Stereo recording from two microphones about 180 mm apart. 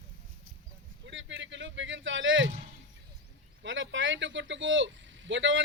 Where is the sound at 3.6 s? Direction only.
90° right.